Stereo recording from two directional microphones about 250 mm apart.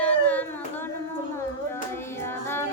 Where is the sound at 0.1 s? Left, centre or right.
Centre.